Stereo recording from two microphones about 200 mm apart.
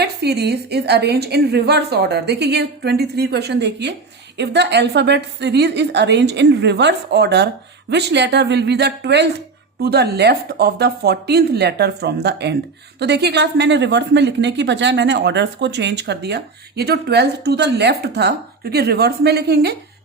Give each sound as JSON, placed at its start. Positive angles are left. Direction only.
{"t": 0.0, "sound": "a woman's voice", "side_deg": -55}